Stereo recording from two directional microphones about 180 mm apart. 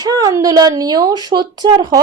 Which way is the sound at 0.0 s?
20° right (ahead or behind).